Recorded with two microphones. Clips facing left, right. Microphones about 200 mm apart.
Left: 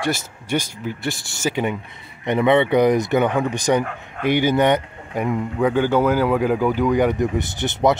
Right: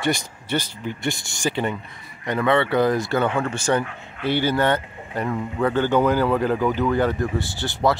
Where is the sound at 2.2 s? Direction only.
20° left (ahead or behind).